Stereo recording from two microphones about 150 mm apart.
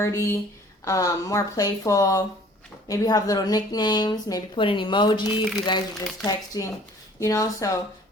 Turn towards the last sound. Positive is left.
turn(degrees=20)  # may be behind; listen again after turning